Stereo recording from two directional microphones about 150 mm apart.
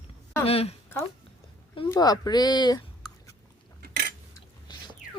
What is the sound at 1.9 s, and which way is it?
Speech, 25° left (ahead or behind).